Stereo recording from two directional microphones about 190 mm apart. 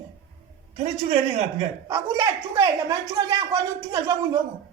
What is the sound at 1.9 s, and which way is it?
Speech, 20° right (ahead or behind).